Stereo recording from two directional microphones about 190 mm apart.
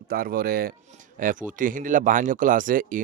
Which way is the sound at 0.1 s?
50° right (ahead or behind).